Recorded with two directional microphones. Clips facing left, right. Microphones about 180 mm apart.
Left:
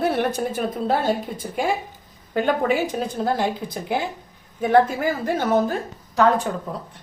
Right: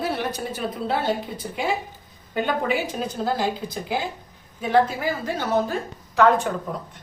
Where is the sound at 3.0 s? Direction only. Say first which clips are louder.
Left 2 dB; 50° left (ahead or behind).